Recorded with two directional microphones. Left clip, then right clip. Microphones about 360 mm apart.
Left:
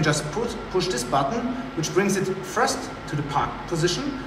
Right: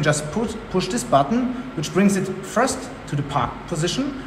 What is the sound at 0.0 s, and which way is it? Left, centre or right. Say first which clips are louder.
A man's voice: right 2 dB; centre.